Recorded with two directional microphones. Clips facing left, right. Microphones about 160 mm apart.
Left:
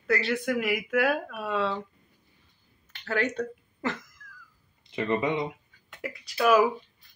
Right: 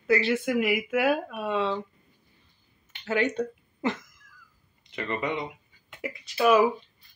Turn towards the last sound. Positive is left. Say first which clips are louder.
# right 1 dB
turn(degrees=0)  # may be behind; listen again after turning